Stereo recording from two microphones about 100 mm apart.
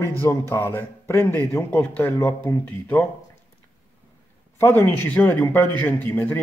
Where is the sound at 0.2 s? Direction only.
25° left (ahead or behind).